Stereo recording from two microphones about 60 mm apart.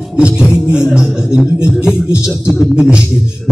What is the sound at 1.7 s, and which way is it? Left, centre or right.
Speech, centre.